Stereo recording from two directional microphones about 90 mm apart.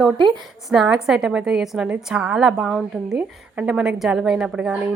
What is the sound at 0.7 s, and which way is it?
A woman's voice, 10° right (ahead or behind).